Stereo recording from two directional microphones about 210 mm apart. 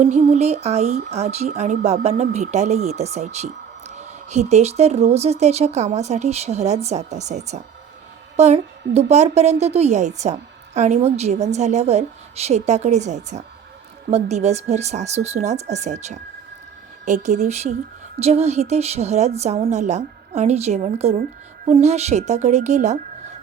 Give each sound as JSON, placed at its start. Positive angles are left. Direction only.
{"t": 0.0, "sound": "speech", "side_deg": -30}